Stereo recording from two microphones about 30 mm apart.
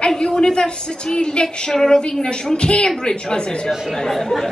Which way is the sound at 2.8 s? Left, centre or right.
Centre.